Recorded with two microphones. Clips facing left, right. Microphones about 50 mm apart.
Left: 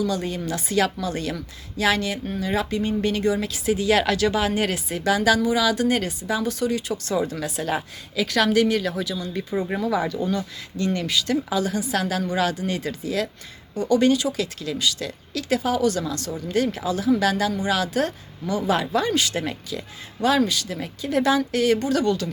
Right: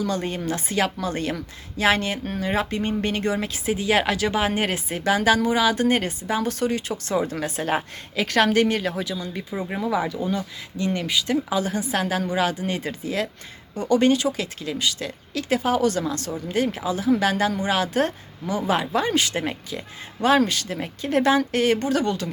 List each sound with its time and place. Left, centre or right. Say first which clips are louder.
0.0 s a woman's voice: even; right
9.5 s a woman's voice: left 2 dB; centre; by 19.8 s right
20.5 s a woman's voice: even; right